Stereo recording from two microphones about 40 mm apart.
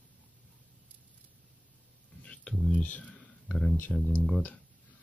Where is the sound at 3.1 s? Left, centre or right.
Centre.